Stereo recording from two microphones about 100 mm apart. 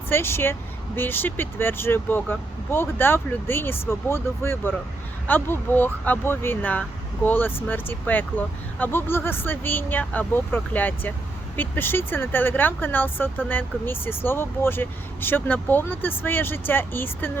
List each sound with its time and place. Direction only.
0.1 s speech: 25° left (ahead or behind)